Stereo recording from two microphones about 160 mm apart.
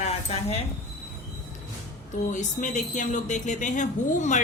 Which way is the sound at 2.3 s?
50° left (ahead or behind).